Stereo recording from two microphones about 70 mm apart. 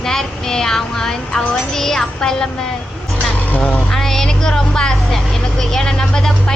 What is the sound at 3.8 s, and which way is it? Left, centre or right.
Speech, centre.